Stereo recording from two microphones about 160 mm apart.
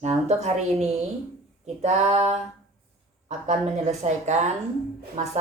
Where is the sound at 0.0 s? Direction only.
45° right (ahead or behind).